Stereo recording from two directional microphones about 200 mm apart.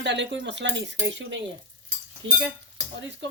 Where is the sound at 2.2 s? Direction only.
65° right (ahead or behind).